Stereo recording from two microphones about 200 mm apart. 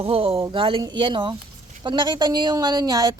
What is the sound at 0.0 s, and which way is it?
Speech, 30° right (ahead or behind).